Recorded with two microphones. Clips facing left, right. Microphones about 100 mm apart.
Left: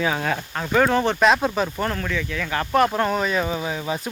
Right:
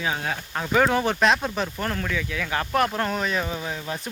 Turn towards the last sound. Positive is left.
turn(degrees=10)  # may be behind; listen again after turning